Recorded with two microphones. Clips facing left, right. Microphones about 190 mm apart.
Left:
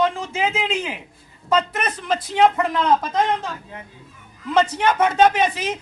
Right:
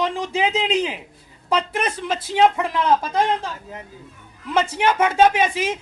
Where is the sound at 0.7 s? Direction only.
15° right (ahead or behind).